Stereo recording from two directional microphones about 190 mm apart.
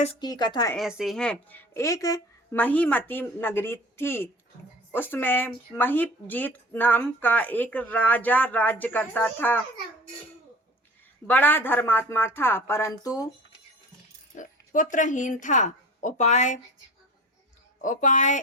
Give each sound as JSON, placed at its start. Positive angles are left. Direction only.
{"t": 0.2, "sound": "speech", "side_deg": 20}
{"t": 0.8, "sound": "speech", "side_deg": 0}
{"t": 11.3, "sound": "speech", "side_deg": 10}
{"t": 14.3, "sound": "a woman's voice", "side_deg": 45}
{"t": 17.7, "sound": "a woman's voice", "side_deg": 40}